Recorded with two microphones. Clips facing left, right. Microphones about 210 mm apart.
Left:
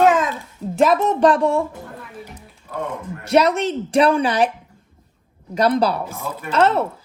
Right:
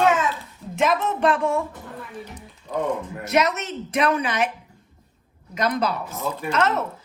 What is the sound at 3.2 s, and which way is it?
Speech, 30° left (ahead or behind).